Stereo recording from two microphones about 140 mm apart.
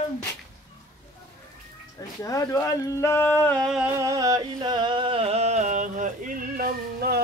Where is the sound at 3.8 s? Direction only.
20° right (ahead or behind); by 7.2 s 90° right.